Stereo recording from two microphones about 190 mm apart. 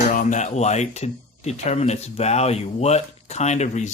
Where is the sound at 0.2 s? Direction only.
40° left (ahead or behind).